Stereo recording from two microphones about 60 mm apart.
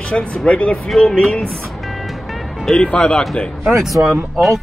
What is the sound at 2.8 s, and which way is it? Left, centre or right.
Speech, centre.